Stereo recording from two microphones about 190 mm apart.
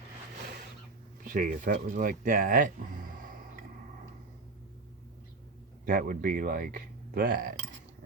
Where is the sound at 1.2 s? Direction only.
45° right (ahead or behind).